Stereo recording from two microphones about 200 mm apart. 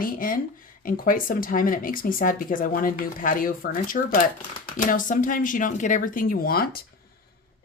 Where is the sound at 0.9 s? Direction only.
45° left (ahead or behind).